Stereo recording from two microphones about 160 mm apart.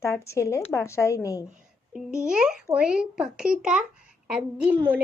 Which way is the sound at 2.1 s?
5° right (ahead or behind).